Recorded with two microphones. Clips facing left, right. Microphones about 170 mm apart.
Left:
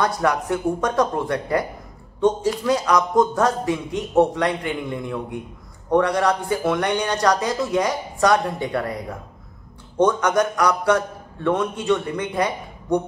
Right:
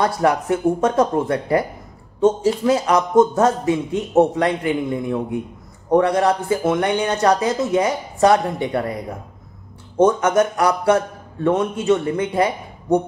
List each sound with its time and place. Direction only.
0.0 s speech: 30° right (ahead or behind)
10.0 s speech: 25° right (ahead or behind)